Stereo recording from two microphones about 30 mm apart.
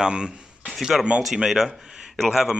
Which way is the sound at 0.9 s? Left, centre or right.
Centre.